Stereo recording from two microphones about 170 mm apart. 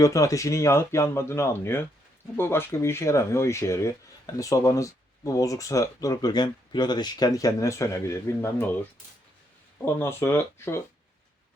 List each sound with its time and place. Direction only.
0.0 s speech: 20° left (ahead or behind)
9.8 s speech: 15° left (ahead or behind)